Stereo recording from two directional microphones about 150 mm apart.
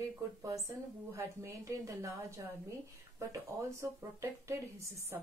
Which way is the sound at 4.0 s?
20° right (ahead or behind).